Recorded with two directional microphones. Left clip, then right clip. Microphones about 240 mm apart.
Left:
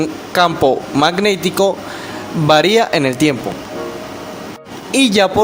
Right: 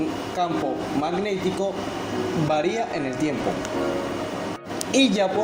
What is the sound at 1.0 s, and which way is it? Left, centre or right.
A man's voice, left.